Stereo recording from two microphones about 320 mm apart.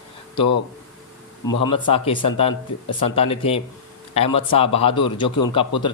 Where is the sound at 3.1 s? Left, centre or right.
Centre.